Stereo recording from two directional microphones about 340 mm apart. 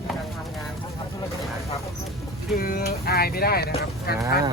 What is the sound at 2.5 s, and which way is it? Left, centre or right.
Speech, left.